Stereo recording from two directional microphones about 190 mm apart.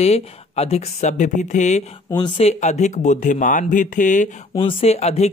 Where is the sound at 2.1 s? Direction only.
25° left (ahead or behind); by 4.3 s 40° left (ahead or behind).